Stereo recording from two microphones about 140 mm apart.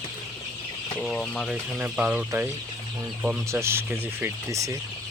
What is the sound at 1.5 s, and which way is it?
Speech, 10° right (ahead or behind).